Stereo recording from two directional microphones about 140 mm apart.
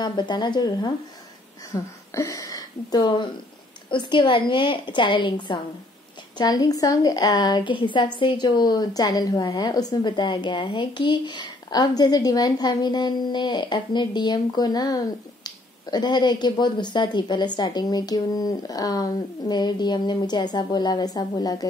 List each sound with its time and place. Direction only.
0.0 s a woman's voice: 30° left (ahead or behind)